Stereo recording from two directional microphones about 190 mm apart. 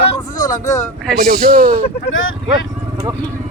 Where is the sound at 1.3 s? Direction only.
50° right (ahead or behind).